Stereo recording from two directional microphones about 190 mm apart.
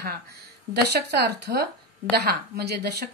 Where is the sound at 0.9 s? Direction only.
60° right (ahead or behind).